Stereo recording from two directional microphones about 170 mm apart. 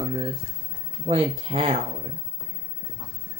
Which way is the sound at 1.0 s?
30° right (ahead or behind).